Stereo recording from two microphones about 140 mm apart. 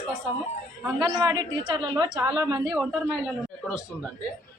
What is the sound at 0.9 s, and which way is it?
A woman's voice, 30° right (ahead or behind).